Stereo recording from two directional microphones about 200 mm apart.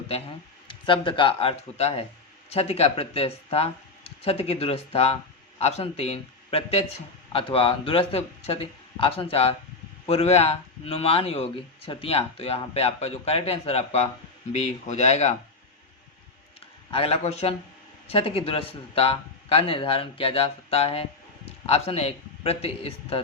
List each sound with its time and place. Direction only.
0.7 s speech: 25° left (ahead or behind)
16.9 s speech: 30° left (ahead or behind)